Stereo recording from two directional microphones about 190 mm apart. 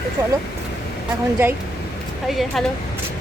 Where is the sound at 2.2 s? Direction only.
Centre (ahead or behind).